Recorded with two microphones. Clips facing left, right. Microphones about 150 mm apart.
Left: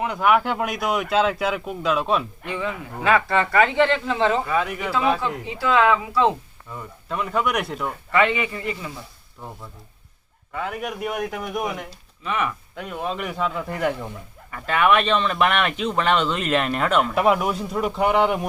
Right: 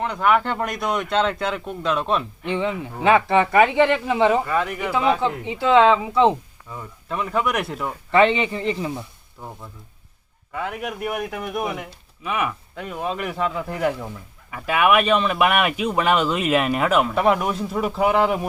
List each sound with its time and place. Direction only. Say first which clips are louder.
0.0 s a man's voice: even; 5° left (ahead or behind)
2.5 s speech: right 5 dB; 20° right (ahead or behind)
4.4 s a man's voice: right 1 dB; centre (ahead or behind)
5.5 s speech: right 3 dB; 20° right (ahead or behind)
6.7 s a man's voice: even; centre (ahead or behind)
8.1 s speech: right 4 dB; 30° right (ahead or behind)
10.5 s a man's voice: even; centre (ahead or behind)